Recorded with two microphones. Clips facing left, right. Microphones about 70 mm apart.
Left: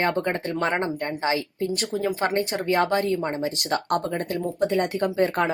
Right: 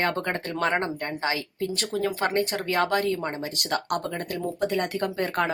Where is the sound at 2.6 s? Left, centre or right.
Left.